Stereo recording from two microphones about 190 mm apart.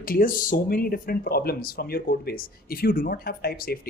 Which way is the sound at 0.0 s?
50° left (ahead or behind).